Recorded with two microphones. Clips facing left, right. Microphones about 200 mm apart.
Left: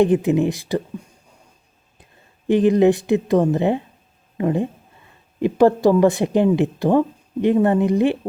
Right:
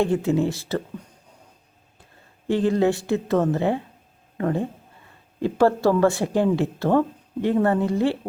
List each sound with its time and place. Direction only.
0.0 s speech: 20° left (ahead or behind)
2.5 s a woman's voice: 20° left (ahead or behind)